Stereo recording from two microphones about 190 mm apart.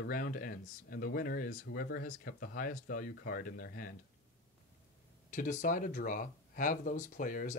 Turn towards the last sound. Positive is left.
turn(degrees=45)  # may be behind; listen again after turning